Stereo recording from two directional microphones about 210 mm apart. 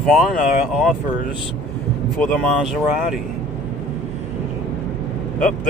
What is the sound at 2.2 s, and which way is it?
Speech, centre (ahead or behind).